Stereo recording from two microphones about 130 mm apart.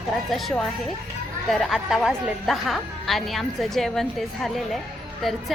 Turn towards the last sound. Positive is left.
turn(degrees=0)  # may be behind; listen again after turning